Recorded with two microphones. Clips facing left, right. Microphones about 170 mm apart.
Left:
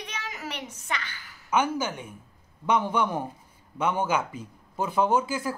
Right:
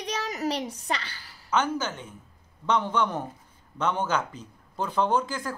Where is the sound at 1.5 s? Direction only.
10° left (ahead or behind).